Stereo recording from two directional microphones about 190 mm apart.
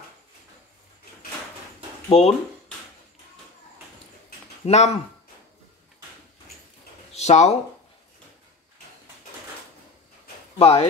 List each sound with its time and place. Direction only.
2.0 s speech: 30° left (ahead or behind)
4.6 s speech: 35° left (ahead or behind)
7.2 s speech: 35° left (ahead or behind)
10.6 s speech: 35° left (ahead or behind)